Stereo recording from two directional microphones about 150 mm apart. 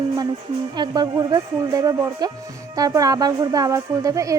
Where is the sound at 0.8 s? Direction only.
25° right (ahead or behind).